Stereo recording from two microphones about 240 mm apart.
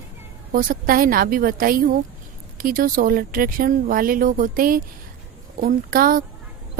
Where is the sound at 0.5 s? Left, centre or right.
Right.